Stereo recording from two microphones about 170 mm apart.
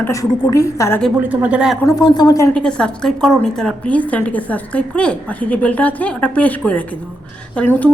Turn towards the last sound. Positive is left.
turn(degrees=10)  # may be behind; listen again after turning